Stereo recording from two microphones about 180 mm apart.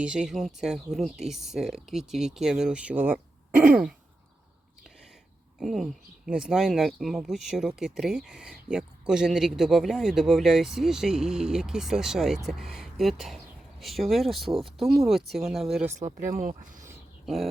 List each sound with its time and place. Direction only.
0.0 s speech: 5° right (ahead or behind)
3.6 s throat clearing: 10° right (ahead or behind)
5.5 s speech: centre (ahead or behind)
16.0 s speech: 25° right (ahead or behind)
16.4 s speech: 45° right (ahead or behind)
17.2 s speech: centre (ahead or behind)